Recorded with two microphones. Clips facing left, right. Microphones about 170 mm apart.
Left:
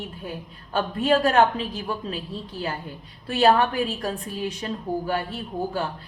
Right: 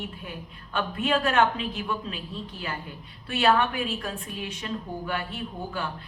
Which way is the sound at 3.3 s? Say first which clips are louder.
Left 4 dB; 35° left (ahead or behind).